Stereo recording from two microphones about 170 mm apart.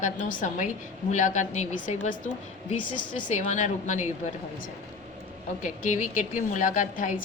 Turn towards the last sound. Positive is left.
turn(degrees=50)  # may be behind; listen again after turning